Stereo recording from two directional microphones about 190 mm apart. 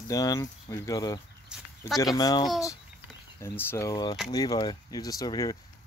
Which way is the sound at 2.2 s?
20° left (ahead or behind).